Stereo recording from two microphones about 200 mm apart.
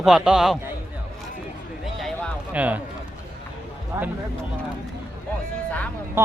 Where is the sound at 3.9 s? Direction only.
10° right (ahead or behind).